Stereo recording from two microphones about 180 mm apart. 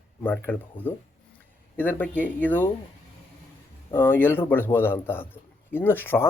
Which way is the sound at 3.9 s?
10° left (ahead or behind).